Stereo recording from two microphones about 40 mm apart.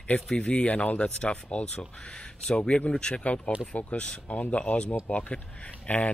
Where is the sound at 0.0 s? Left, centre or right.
Left.